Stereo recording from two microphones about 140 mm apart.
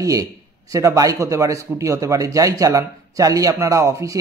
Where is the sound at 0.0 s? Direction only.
25° right (ahead or behind).